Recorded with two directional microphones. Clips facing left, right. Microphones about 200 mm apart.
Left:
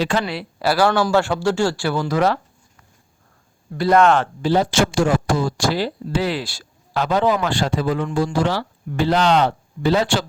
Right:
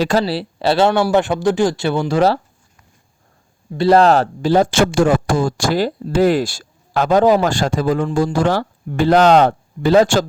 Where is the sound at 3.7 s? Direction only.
30° right (ahead or behind).